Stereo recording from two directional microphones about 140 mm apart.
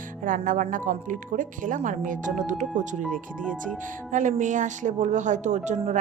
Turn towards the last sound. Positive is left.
turn(degrees=-55)  # may be behind; listen again after turning